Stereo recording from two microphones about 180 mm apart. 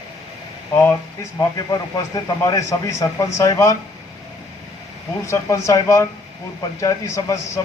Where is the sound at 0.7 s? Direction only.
10° left (ahead or behind).